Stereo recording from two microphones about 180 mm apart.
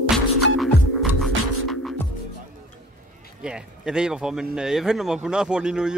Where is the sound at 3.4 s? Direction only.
5° right (ahead or behind).